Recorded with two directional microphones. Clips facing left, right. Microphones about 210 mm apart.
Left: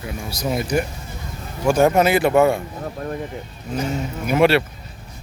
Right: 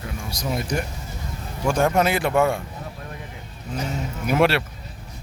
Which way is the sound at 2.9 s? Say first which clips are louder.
Left 10 dB; 50° left (ahead or behind).